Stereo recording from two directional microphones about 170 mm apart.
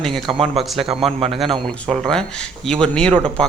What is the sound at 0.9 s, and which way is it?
Speech, 35° right (ahead or behind).